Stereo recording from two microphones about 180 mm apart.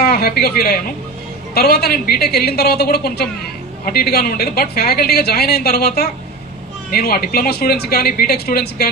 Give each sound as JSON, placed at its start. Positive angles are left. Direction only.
{"t": 0.0, "sound": "a woman's voice", "side_deg": 60}